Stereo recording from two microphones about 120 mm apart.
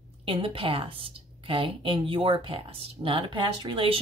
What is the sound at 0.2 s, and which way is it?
A woman's voice, 50° right (ahead or behind).